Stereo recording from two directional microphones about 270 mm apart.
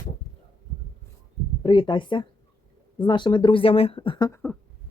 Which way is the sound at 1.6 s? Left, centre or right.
Centre.